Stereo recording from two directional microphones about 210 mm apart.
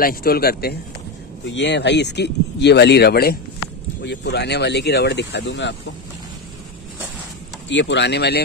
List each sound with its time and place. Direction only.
0.0 s speech: 45° left (ahead or behind)
1.4 s speech: 60° left (ahead or behind)
7.7 s speech: 55° left (ahead or behind)